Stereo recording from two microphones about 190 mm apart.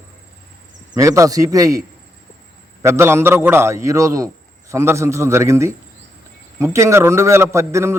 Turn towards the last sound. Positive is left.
turn(degrees=-15)  # may be behind; listen again after turning